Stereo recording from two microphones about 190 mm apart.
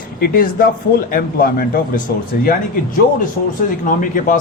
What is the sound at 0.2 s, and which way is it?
A man's voice, 50° left (ahead or behind).